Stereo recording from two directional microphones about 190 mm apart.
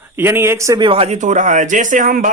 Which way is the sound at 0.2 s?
10° right (ahead or behind).